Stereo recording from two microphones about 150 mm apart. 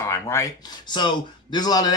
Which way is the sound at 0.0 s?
20° left (ahead or behind).